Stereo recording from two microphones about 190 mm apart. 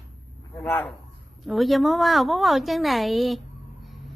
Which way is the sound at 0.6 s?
10° left (ahead or behind).